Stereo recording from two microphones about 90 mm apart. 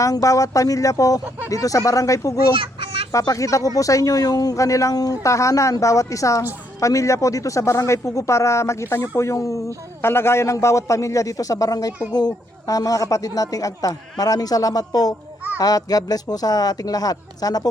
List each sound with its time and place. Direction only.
0.0 s speech: 40° left (ahead or behind)
2.6 s children playing: 90° right
3.1 s speech: 40° left (ahead or behind)